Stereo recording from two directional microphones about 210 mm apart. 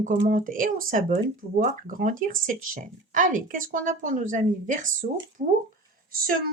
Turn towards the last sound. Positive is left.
turn(degrees=-45)  # may be behind; listen again after turning